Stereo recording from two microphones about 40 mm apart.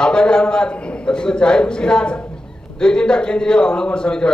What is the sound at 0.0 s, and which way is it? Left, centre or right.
A man's voice, left.